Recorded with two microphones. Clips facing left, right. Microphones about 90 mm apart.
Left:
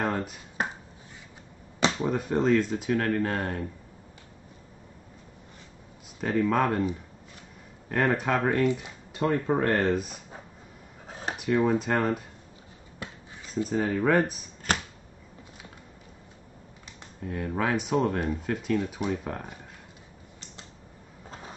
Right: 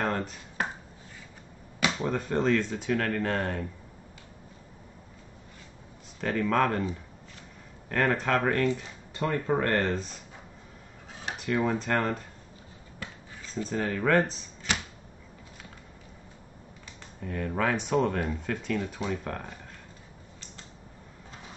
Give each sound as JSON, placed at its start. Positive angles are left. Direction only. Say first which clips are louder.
{"t": 0.0, "sound": "finger snapping", "louder": "left 1 dB", "side_deg": 5}
{"t": 2.0, "sound": "speech", "louder": "left 2 dB", "side_deg": 10}
{"t": 6.2, "sound": "speech", "louder": "left 1 dB", "side_deg": 5}
{"t": 7.9, "sound": "speech", "louder": "left 1 dB", "side_deg": 5}
{"t": 11.3, "sound": "speech", "louder": "left 4 dB", "side_deg": 10}
{"t": 13.6, "sound": "speech", "louder": "left 4 dB", "side_deg": 10}
{"t": 14.7, "sound": "a sound", "louder": "left 3 dB", "side_deg": 45}
{"t": 17.2, "sound": "speech", "louder": "even", "side_deg": 5}